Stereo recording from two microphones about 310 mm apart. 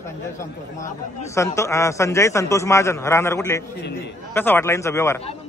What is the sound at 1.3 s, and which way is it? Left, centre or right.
A man's voice, centre.